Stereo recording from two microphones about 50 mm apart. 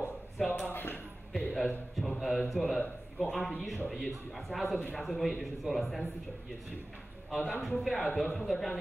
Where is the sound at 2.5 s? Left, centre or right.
Centre.